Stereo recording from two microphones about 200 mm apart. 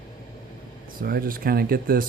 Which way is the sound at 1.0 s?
50° right (ahead or behind).